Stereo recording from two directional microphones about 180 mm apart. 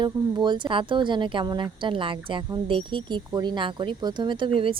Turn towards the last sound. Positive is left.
turn(degrees=-30)  # may be behind; listen again after turning